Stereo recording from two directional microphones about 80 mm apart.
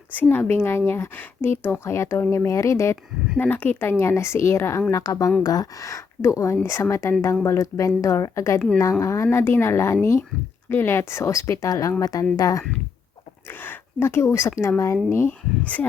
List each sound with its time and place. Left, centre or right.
0.2 s speech: left
3.3 s speech: left
9.2 s speech: left
13.5 s speech: left
15.6 s speech: centre